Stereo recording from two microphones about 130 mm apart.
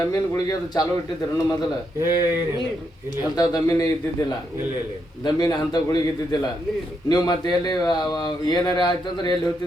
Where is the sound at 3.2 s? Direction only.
30° left (ahead or behind).